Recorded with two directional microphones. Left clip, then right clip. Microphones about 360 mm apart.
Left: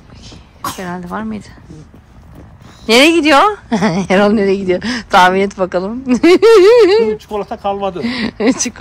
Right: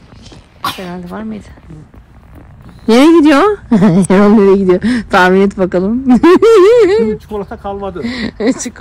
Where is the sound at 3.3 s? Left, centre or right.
Right.